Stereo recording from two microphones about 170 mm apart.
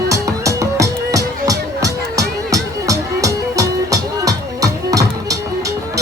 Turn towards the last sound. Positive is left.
turn(degrees=-20)  # may be behind; listen again after turning